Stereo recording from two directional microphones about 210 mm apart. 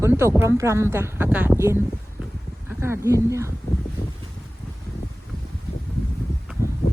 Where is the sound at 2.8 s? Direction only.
15° right (ahead or behind).